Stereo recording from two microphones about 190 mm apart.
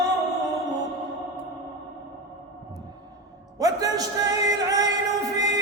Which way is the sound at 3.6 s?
20° right (ahead or behind).